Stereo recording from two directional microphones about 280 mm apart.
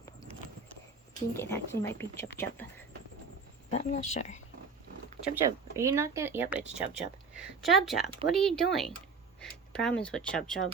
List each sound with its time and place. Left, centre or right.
1.3 s speech: centre
3.7 s speech: left
5.3 s speech: centre